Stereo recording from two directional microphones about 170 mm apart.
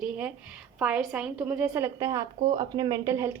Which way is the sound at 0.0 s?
10° right (ahead or behind).